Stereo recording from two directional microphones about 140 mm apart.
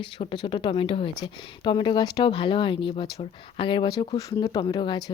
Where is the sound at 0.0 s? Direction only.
35° left (ahead or behind).